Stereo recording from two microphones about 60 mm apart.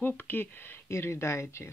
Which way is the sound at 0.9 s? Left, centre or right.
Left.